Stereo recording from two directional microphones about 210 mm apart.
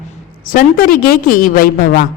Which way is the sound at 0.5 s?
45° left (ahead or behind).